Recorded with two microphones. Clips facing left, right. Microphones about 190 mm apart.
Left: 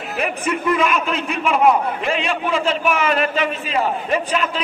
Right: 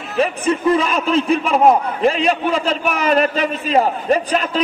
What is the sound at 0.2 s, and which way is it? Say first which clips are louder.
A man's voice: right 6 dB; 30° right (ahead or behind).